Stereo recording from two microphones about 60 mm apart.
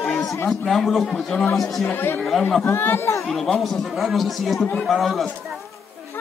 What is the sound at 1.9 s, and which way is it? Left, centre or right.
Speech, left.